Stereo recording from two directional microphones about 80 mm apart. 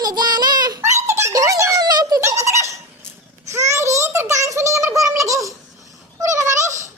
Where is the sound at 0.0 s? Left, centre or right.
Right.